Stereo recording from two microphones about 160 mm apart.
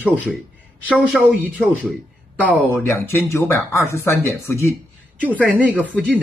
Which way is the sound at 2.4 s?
15° left (ahead or behind).